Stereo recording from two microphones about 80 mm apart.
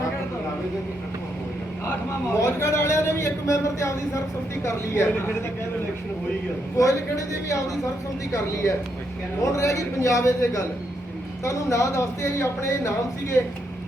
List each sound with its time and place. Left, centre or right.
2.3 s a man's voice: left
4.6 s speech: left
6.7 s a man's voice: left
9.4 s a man's voice: left